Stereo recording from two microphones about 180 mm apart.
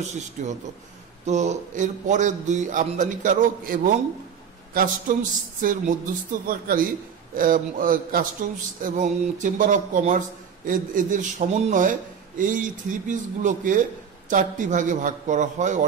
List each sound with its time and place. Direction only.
0.0 s a man's voice: 40° right (ahead or behind)
5.6 s a man's voice: 50° right (ahead or behind)